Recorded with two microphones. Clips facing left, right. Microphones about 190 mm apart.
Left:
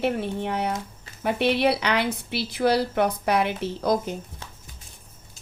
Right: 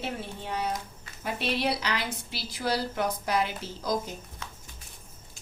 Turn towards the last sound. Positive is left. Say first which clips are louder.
# left 7 dB
turn(degrees=60)  # may be behind; listen again after turning